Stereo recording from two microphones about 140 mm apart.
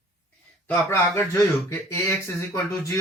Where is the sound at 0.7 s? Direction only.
15° left (ahead or behind).